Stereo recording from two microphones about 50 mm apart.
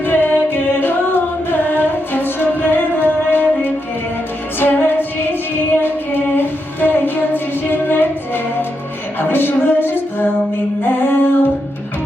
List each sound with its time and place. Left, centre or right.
0.0 s music: left
6.3 s female singing: left
7.7 s music: left
9.3 s a sound: left
10.8 s singing: left